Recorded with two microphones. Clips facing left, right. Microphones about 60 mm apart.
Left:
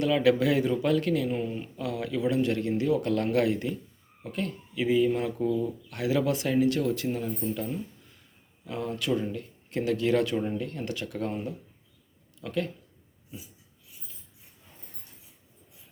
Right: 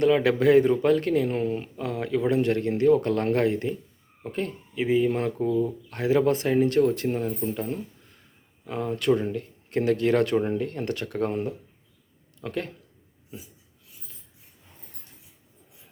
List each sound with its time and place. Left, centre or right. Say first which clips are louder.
0.0 s speech: right 3 dB; right
8.6 s speech: right 6 dB; right